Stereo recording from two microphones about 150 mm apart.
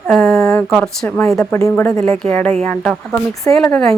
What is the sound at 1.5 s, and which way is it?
A woman's voice, 15° left (ahead or behind).